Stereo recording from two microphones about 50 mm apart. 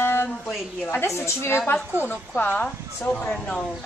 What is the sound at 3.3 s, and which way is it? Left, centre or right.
Speech, left.